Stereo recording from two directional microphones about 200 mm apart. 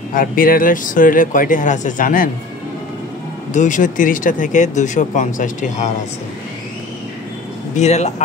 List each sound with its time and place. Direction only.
0.1 s speech: 45° left (ahead or behind)
3.5 s speech: 40° left (ahead or behind)
7.7 s speech: 35° left (ahead or behind)